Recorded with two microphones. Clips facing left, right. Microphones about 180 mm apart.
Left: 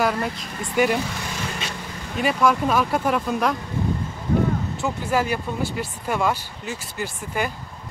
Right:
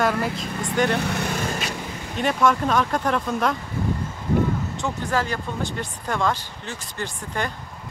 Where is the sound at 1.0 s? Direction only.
60° right (ahead or behind).